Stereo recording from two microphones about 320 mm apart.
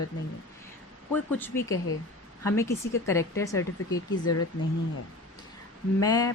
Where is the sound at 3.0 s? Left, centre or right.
Centre.